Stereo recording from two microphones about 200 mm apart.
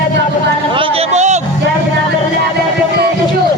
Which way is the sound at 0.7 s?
25° right (ahead or behind).